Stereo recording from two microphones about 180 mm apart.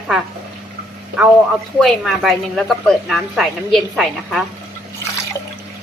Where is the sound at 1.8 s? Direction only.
Centre (ahead or behind).